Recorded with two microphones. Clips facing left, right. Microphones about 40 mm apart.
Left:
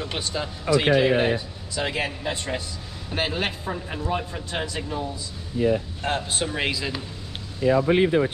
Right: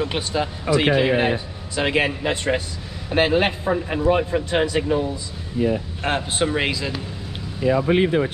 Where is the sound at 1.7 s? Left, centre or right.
Right.